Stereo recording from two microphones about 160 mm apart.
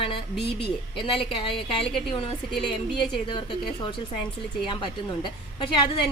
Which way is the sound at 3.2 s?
30° left (ahead or behind).